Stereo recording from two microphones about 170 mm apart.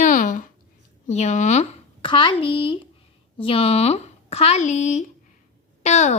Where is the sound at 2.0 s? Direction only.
30° left (ahead or behind).